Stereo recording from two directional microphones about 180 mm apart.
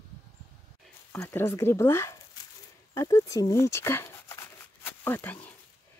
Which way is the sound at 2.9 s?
20° left (ahead or behind).